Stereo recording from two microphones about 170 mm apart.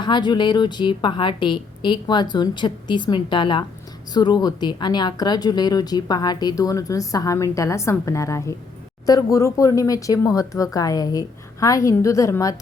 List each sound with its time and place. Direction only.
0.0 s speech: 25° left (ahead or behind)